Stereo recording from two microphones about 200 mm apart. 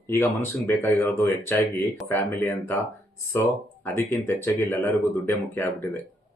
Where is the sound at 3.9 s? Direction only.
10° left (ahead or behind).